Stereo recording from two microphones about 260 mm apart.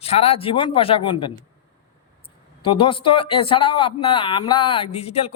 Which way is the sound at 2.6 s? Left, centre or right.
Centre.